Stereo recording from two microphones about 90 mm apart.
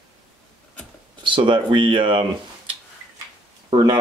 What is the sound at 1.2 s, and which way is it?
Speech, 65° right (ahead or behind).